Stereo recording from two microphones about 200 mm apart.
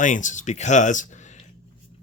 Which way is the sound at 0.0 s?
40° left (ahead or behind).